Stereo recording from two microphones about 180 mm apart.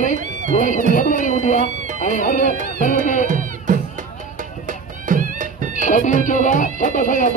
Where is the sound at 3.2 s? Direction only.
45° right (ahead or behind).